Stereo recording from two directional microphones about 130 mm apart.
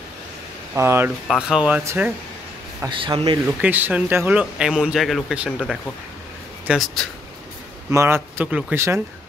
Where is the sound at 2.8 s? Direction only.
40° right (ahead or behind).